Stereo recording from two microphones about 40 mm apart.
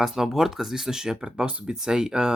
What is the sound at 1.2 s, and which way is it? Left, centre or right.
Speech, right.